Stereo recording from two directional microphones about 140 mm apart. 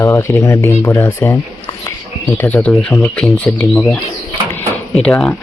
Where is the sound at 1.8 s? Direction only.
15° left (ahead or behind).